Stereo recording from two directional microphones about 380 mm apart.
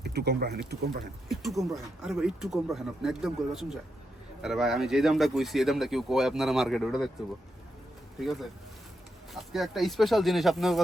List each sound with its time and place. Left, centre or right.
0.0 s speech: right
1.3 s speech: centre
8.2 s speech: centre